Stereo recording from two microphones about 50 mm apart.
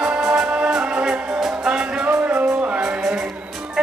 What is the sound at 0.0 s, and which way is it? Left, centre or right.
Music, centre.